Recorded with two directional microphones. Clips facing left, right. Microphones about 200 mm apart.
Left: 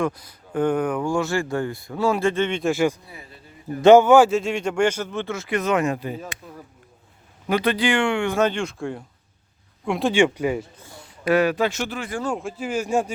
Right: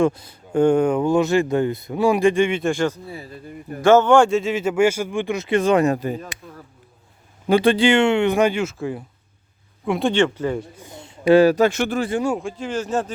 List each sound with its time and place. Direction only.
0.0 s speech: 25° right (ahead or behind)
2.6 s speech: 5° left (ahead or behind)
3.8 s a man's voice: 20° left (ahead or behind)
4.0 s speech: 5° left (ahead or behind); by 6.1 s 40° right (ahead or behind)
7.4 s speech: 30° right (ahead or behind); by 10.2 s centre (ahead or behind)
10.2 s speech: 15° left (ahead or behind)
10.8 s speech: 20° right (ahead or behind); by 11.7 s 40° right (ahead or behind)
11.7 s speech: 55° right (ahead or behind)
12.4 s speech: 5° left (ahead or behind)